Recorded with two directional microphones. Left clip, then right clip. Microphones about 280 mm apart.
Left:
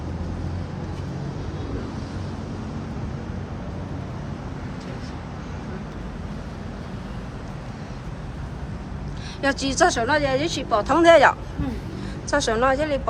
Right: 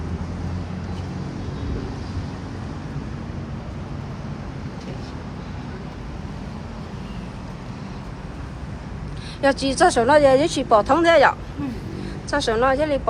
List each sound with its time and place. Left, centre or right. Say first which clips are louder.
9.4 s speech: right 3 dB; centre